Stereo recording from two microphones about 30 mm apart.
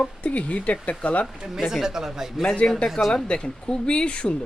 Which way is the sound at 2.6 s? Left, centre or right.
Left.